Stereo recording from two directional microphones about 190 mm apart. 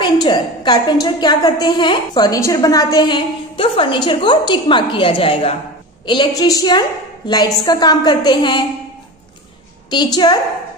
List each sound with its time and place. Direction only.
0.0 s a woman's voice: 25° left (ahead or behind)
10.1 s a woman's voice: 20° left (ahead or behind)